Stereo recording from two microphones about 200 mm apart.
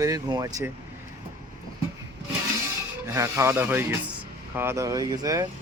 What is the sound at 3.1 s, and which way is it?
Speech, 15° right (ahead or behind).